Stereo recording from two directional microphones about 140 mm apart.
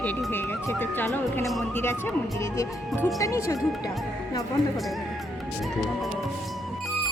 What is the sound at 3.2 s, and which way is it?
Speech, 25° left (ahead or behind).